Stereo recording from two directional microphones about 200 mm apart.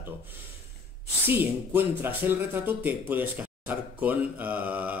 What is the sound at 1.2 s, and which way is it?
Speech, 10° right (ahead or behind).